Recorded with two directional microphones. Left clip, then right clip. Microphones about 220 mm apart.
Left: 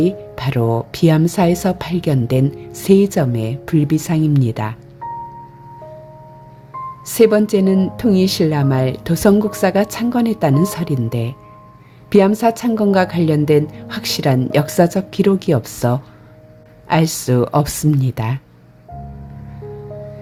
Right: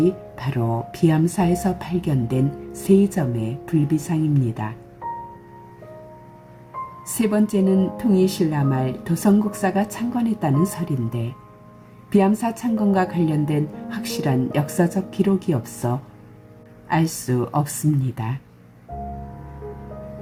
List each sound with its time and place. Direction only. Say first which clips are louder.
0.3 s speech: left 7 dB; 55° left (ahead or behind)
7.2 s speech: left 9 dB; 50° left (ahead or behind)